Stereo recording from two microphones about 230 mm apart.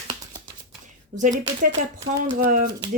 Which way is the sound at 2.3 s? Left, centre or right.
Right.